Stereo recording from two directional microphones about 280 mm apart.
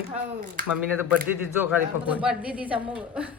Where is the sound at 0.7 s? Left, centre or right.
Centre.